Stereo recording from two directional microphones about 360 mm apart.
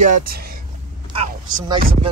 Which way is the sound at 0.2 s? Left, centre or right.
Right.